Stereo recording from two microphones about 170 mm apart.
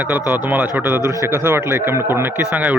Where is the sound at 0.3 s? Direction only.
10° right (ahead or behind).